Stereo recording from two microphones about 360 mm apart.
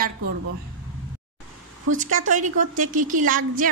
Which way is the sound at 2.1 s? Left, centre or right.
Right.